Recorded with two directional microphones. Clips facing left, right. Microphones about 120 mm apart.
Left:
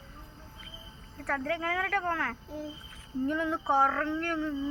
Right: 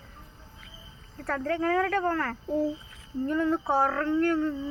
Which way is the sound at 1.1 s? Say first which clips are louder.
Right 3 dB; 5° right (ahead or behind).